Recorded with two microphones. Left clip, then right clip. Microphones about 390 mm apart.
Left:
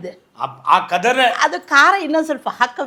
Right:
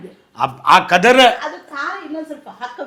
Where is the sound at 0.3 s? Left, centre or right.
Right.